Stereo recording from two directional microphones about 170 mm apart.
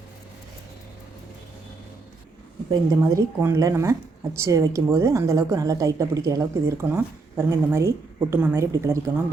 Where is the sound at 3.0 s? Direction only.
15° right (ahead or behind).